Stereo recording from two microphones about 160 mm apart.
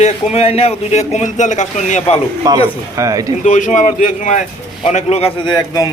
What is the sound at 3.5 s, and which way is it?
Speech, 50° left (ahead or behind).